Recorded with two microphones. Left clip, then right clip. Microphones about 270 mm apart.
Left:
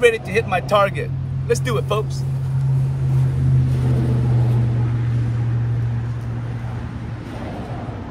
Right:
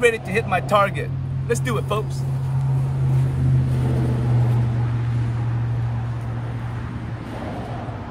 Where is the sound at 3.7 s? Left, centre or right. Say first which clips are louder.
Left 1 dB; right.